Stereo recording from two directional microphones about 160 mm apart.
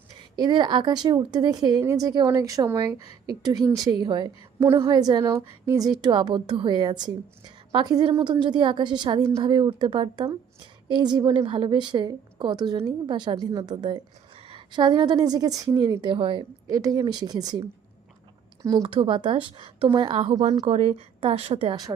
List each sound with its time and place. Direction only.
0.3 s a woman's voice: 25° right (ahead or behind)
18.8 s a woman's voice: 35° right (ahead or behind)
20.3 s a woman's voice: 45° right (ahead or behind); by 21.9 s 25° right (ahead or behind)